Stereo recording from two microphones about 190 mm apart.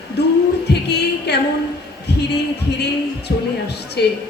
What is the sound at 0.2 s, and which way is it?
Music, 60° left (ahead or behind).